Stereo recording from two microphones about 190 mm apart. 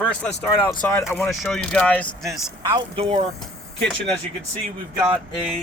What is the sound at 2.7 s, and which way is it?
Speech, 30° right (ahead or behind).